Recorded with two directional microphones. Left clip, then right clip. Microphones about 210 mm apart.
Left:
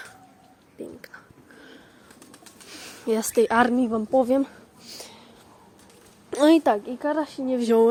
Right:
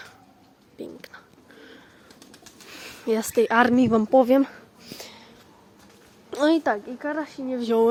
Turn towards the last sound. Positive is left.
turn(degrees=25)  # may be behind; listen again after turning